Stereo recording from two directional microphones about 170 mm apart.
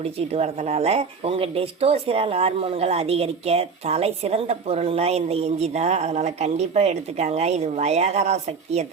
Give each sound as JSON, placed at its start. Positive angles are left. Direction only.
{"t": 0.0, "sound": "speech", "side_deg": -35}